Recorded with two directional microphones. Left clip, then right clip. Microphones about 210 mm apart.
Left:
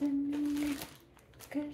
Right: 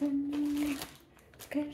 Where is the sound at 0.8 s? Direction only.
5° right (ahead or behind).